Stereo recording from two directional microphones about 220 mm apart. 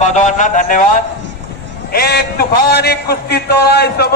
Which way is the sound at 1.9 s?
45° left (ahead or behind).